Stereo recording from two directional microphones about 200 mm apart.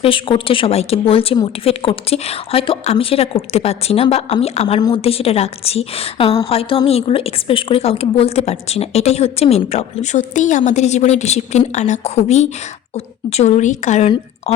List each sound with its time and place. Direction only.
0.0 s a woman's voice: 25° left (ahead or behind)